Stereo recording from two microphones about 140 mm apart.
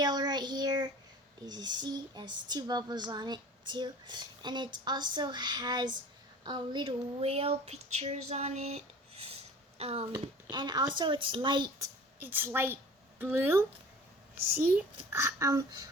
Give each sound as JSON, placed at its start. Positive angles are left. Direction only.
{"t": 0.0, "sound": "child singing", "side_deg": -30}
{"t": 1.5, "sound": "speech", "side_deg": -30}
{"t": 10.5, "sound": "speech", "side_deg": -30}
{"t": 11.8, "sound": "a woman's voice", "side_deg": -15}